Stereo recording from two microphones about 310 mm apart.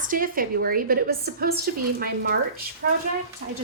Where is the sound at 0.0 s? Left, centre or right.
Right.